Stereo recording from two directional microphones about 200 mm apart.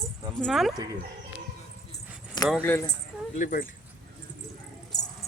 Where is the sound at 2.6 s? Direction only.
10° left (ahead or behind).